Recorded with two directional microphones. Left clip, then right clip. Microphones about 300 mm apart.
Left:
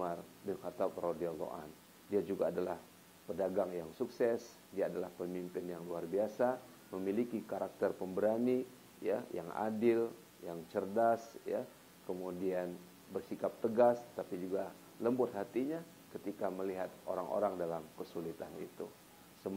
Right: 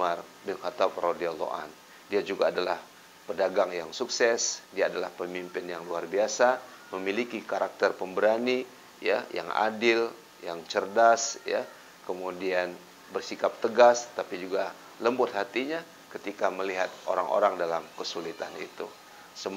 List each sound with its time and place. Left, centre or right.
0.0 s speech: centre
12.1 s speech: right
12.4 s speech: centre